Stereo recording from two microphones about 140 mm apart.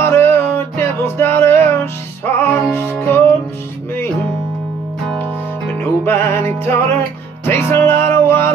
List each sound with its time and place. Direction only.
0.0 s music: 15° left (ahead or behind)
5.8 s music: 15° left (ahead or behind)